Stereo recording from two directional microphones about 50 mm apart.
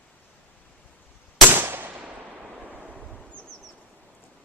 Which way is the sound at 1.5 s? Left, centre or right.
Right.